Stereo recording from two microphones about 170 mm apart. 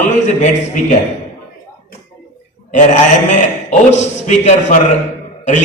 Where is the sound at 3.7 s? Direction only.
40° left (ahead or behind).